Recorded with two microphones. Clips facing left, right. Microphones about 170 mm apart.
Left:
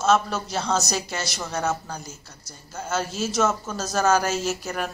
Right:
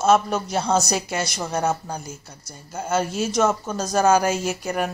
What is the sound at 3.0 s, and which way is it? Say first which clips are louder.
Speech: right 3 dB; 60° right (ahead or behind).